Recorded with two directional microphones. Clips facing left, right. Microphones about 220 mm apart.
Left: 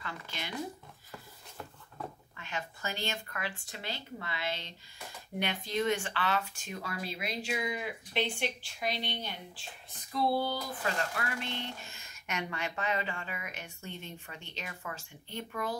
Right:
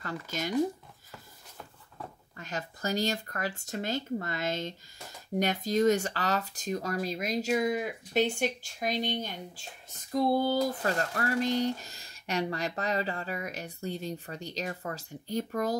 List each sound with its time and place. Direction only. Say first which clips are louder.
0.0 s speech: right 8 dB; 45° right (ahead or behind)
2.3 s speech: right 6 dB; 40° right (ahead or behind)